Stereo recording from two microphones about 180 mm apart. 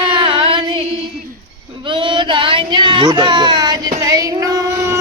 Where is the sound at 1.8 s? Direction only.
30° right (ahead or behind).